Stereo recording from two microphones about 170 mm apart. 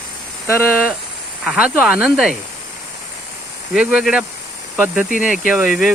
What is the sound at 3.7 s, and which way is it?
Speech, 5° right (ahead or behind).